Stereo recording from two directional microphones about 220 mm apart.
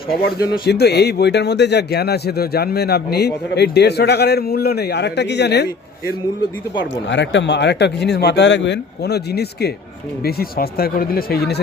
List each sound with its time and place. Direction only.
0.6 s speech: 45° left (ahead or behind)
7.1 s speech: 55° left (ahead or behind)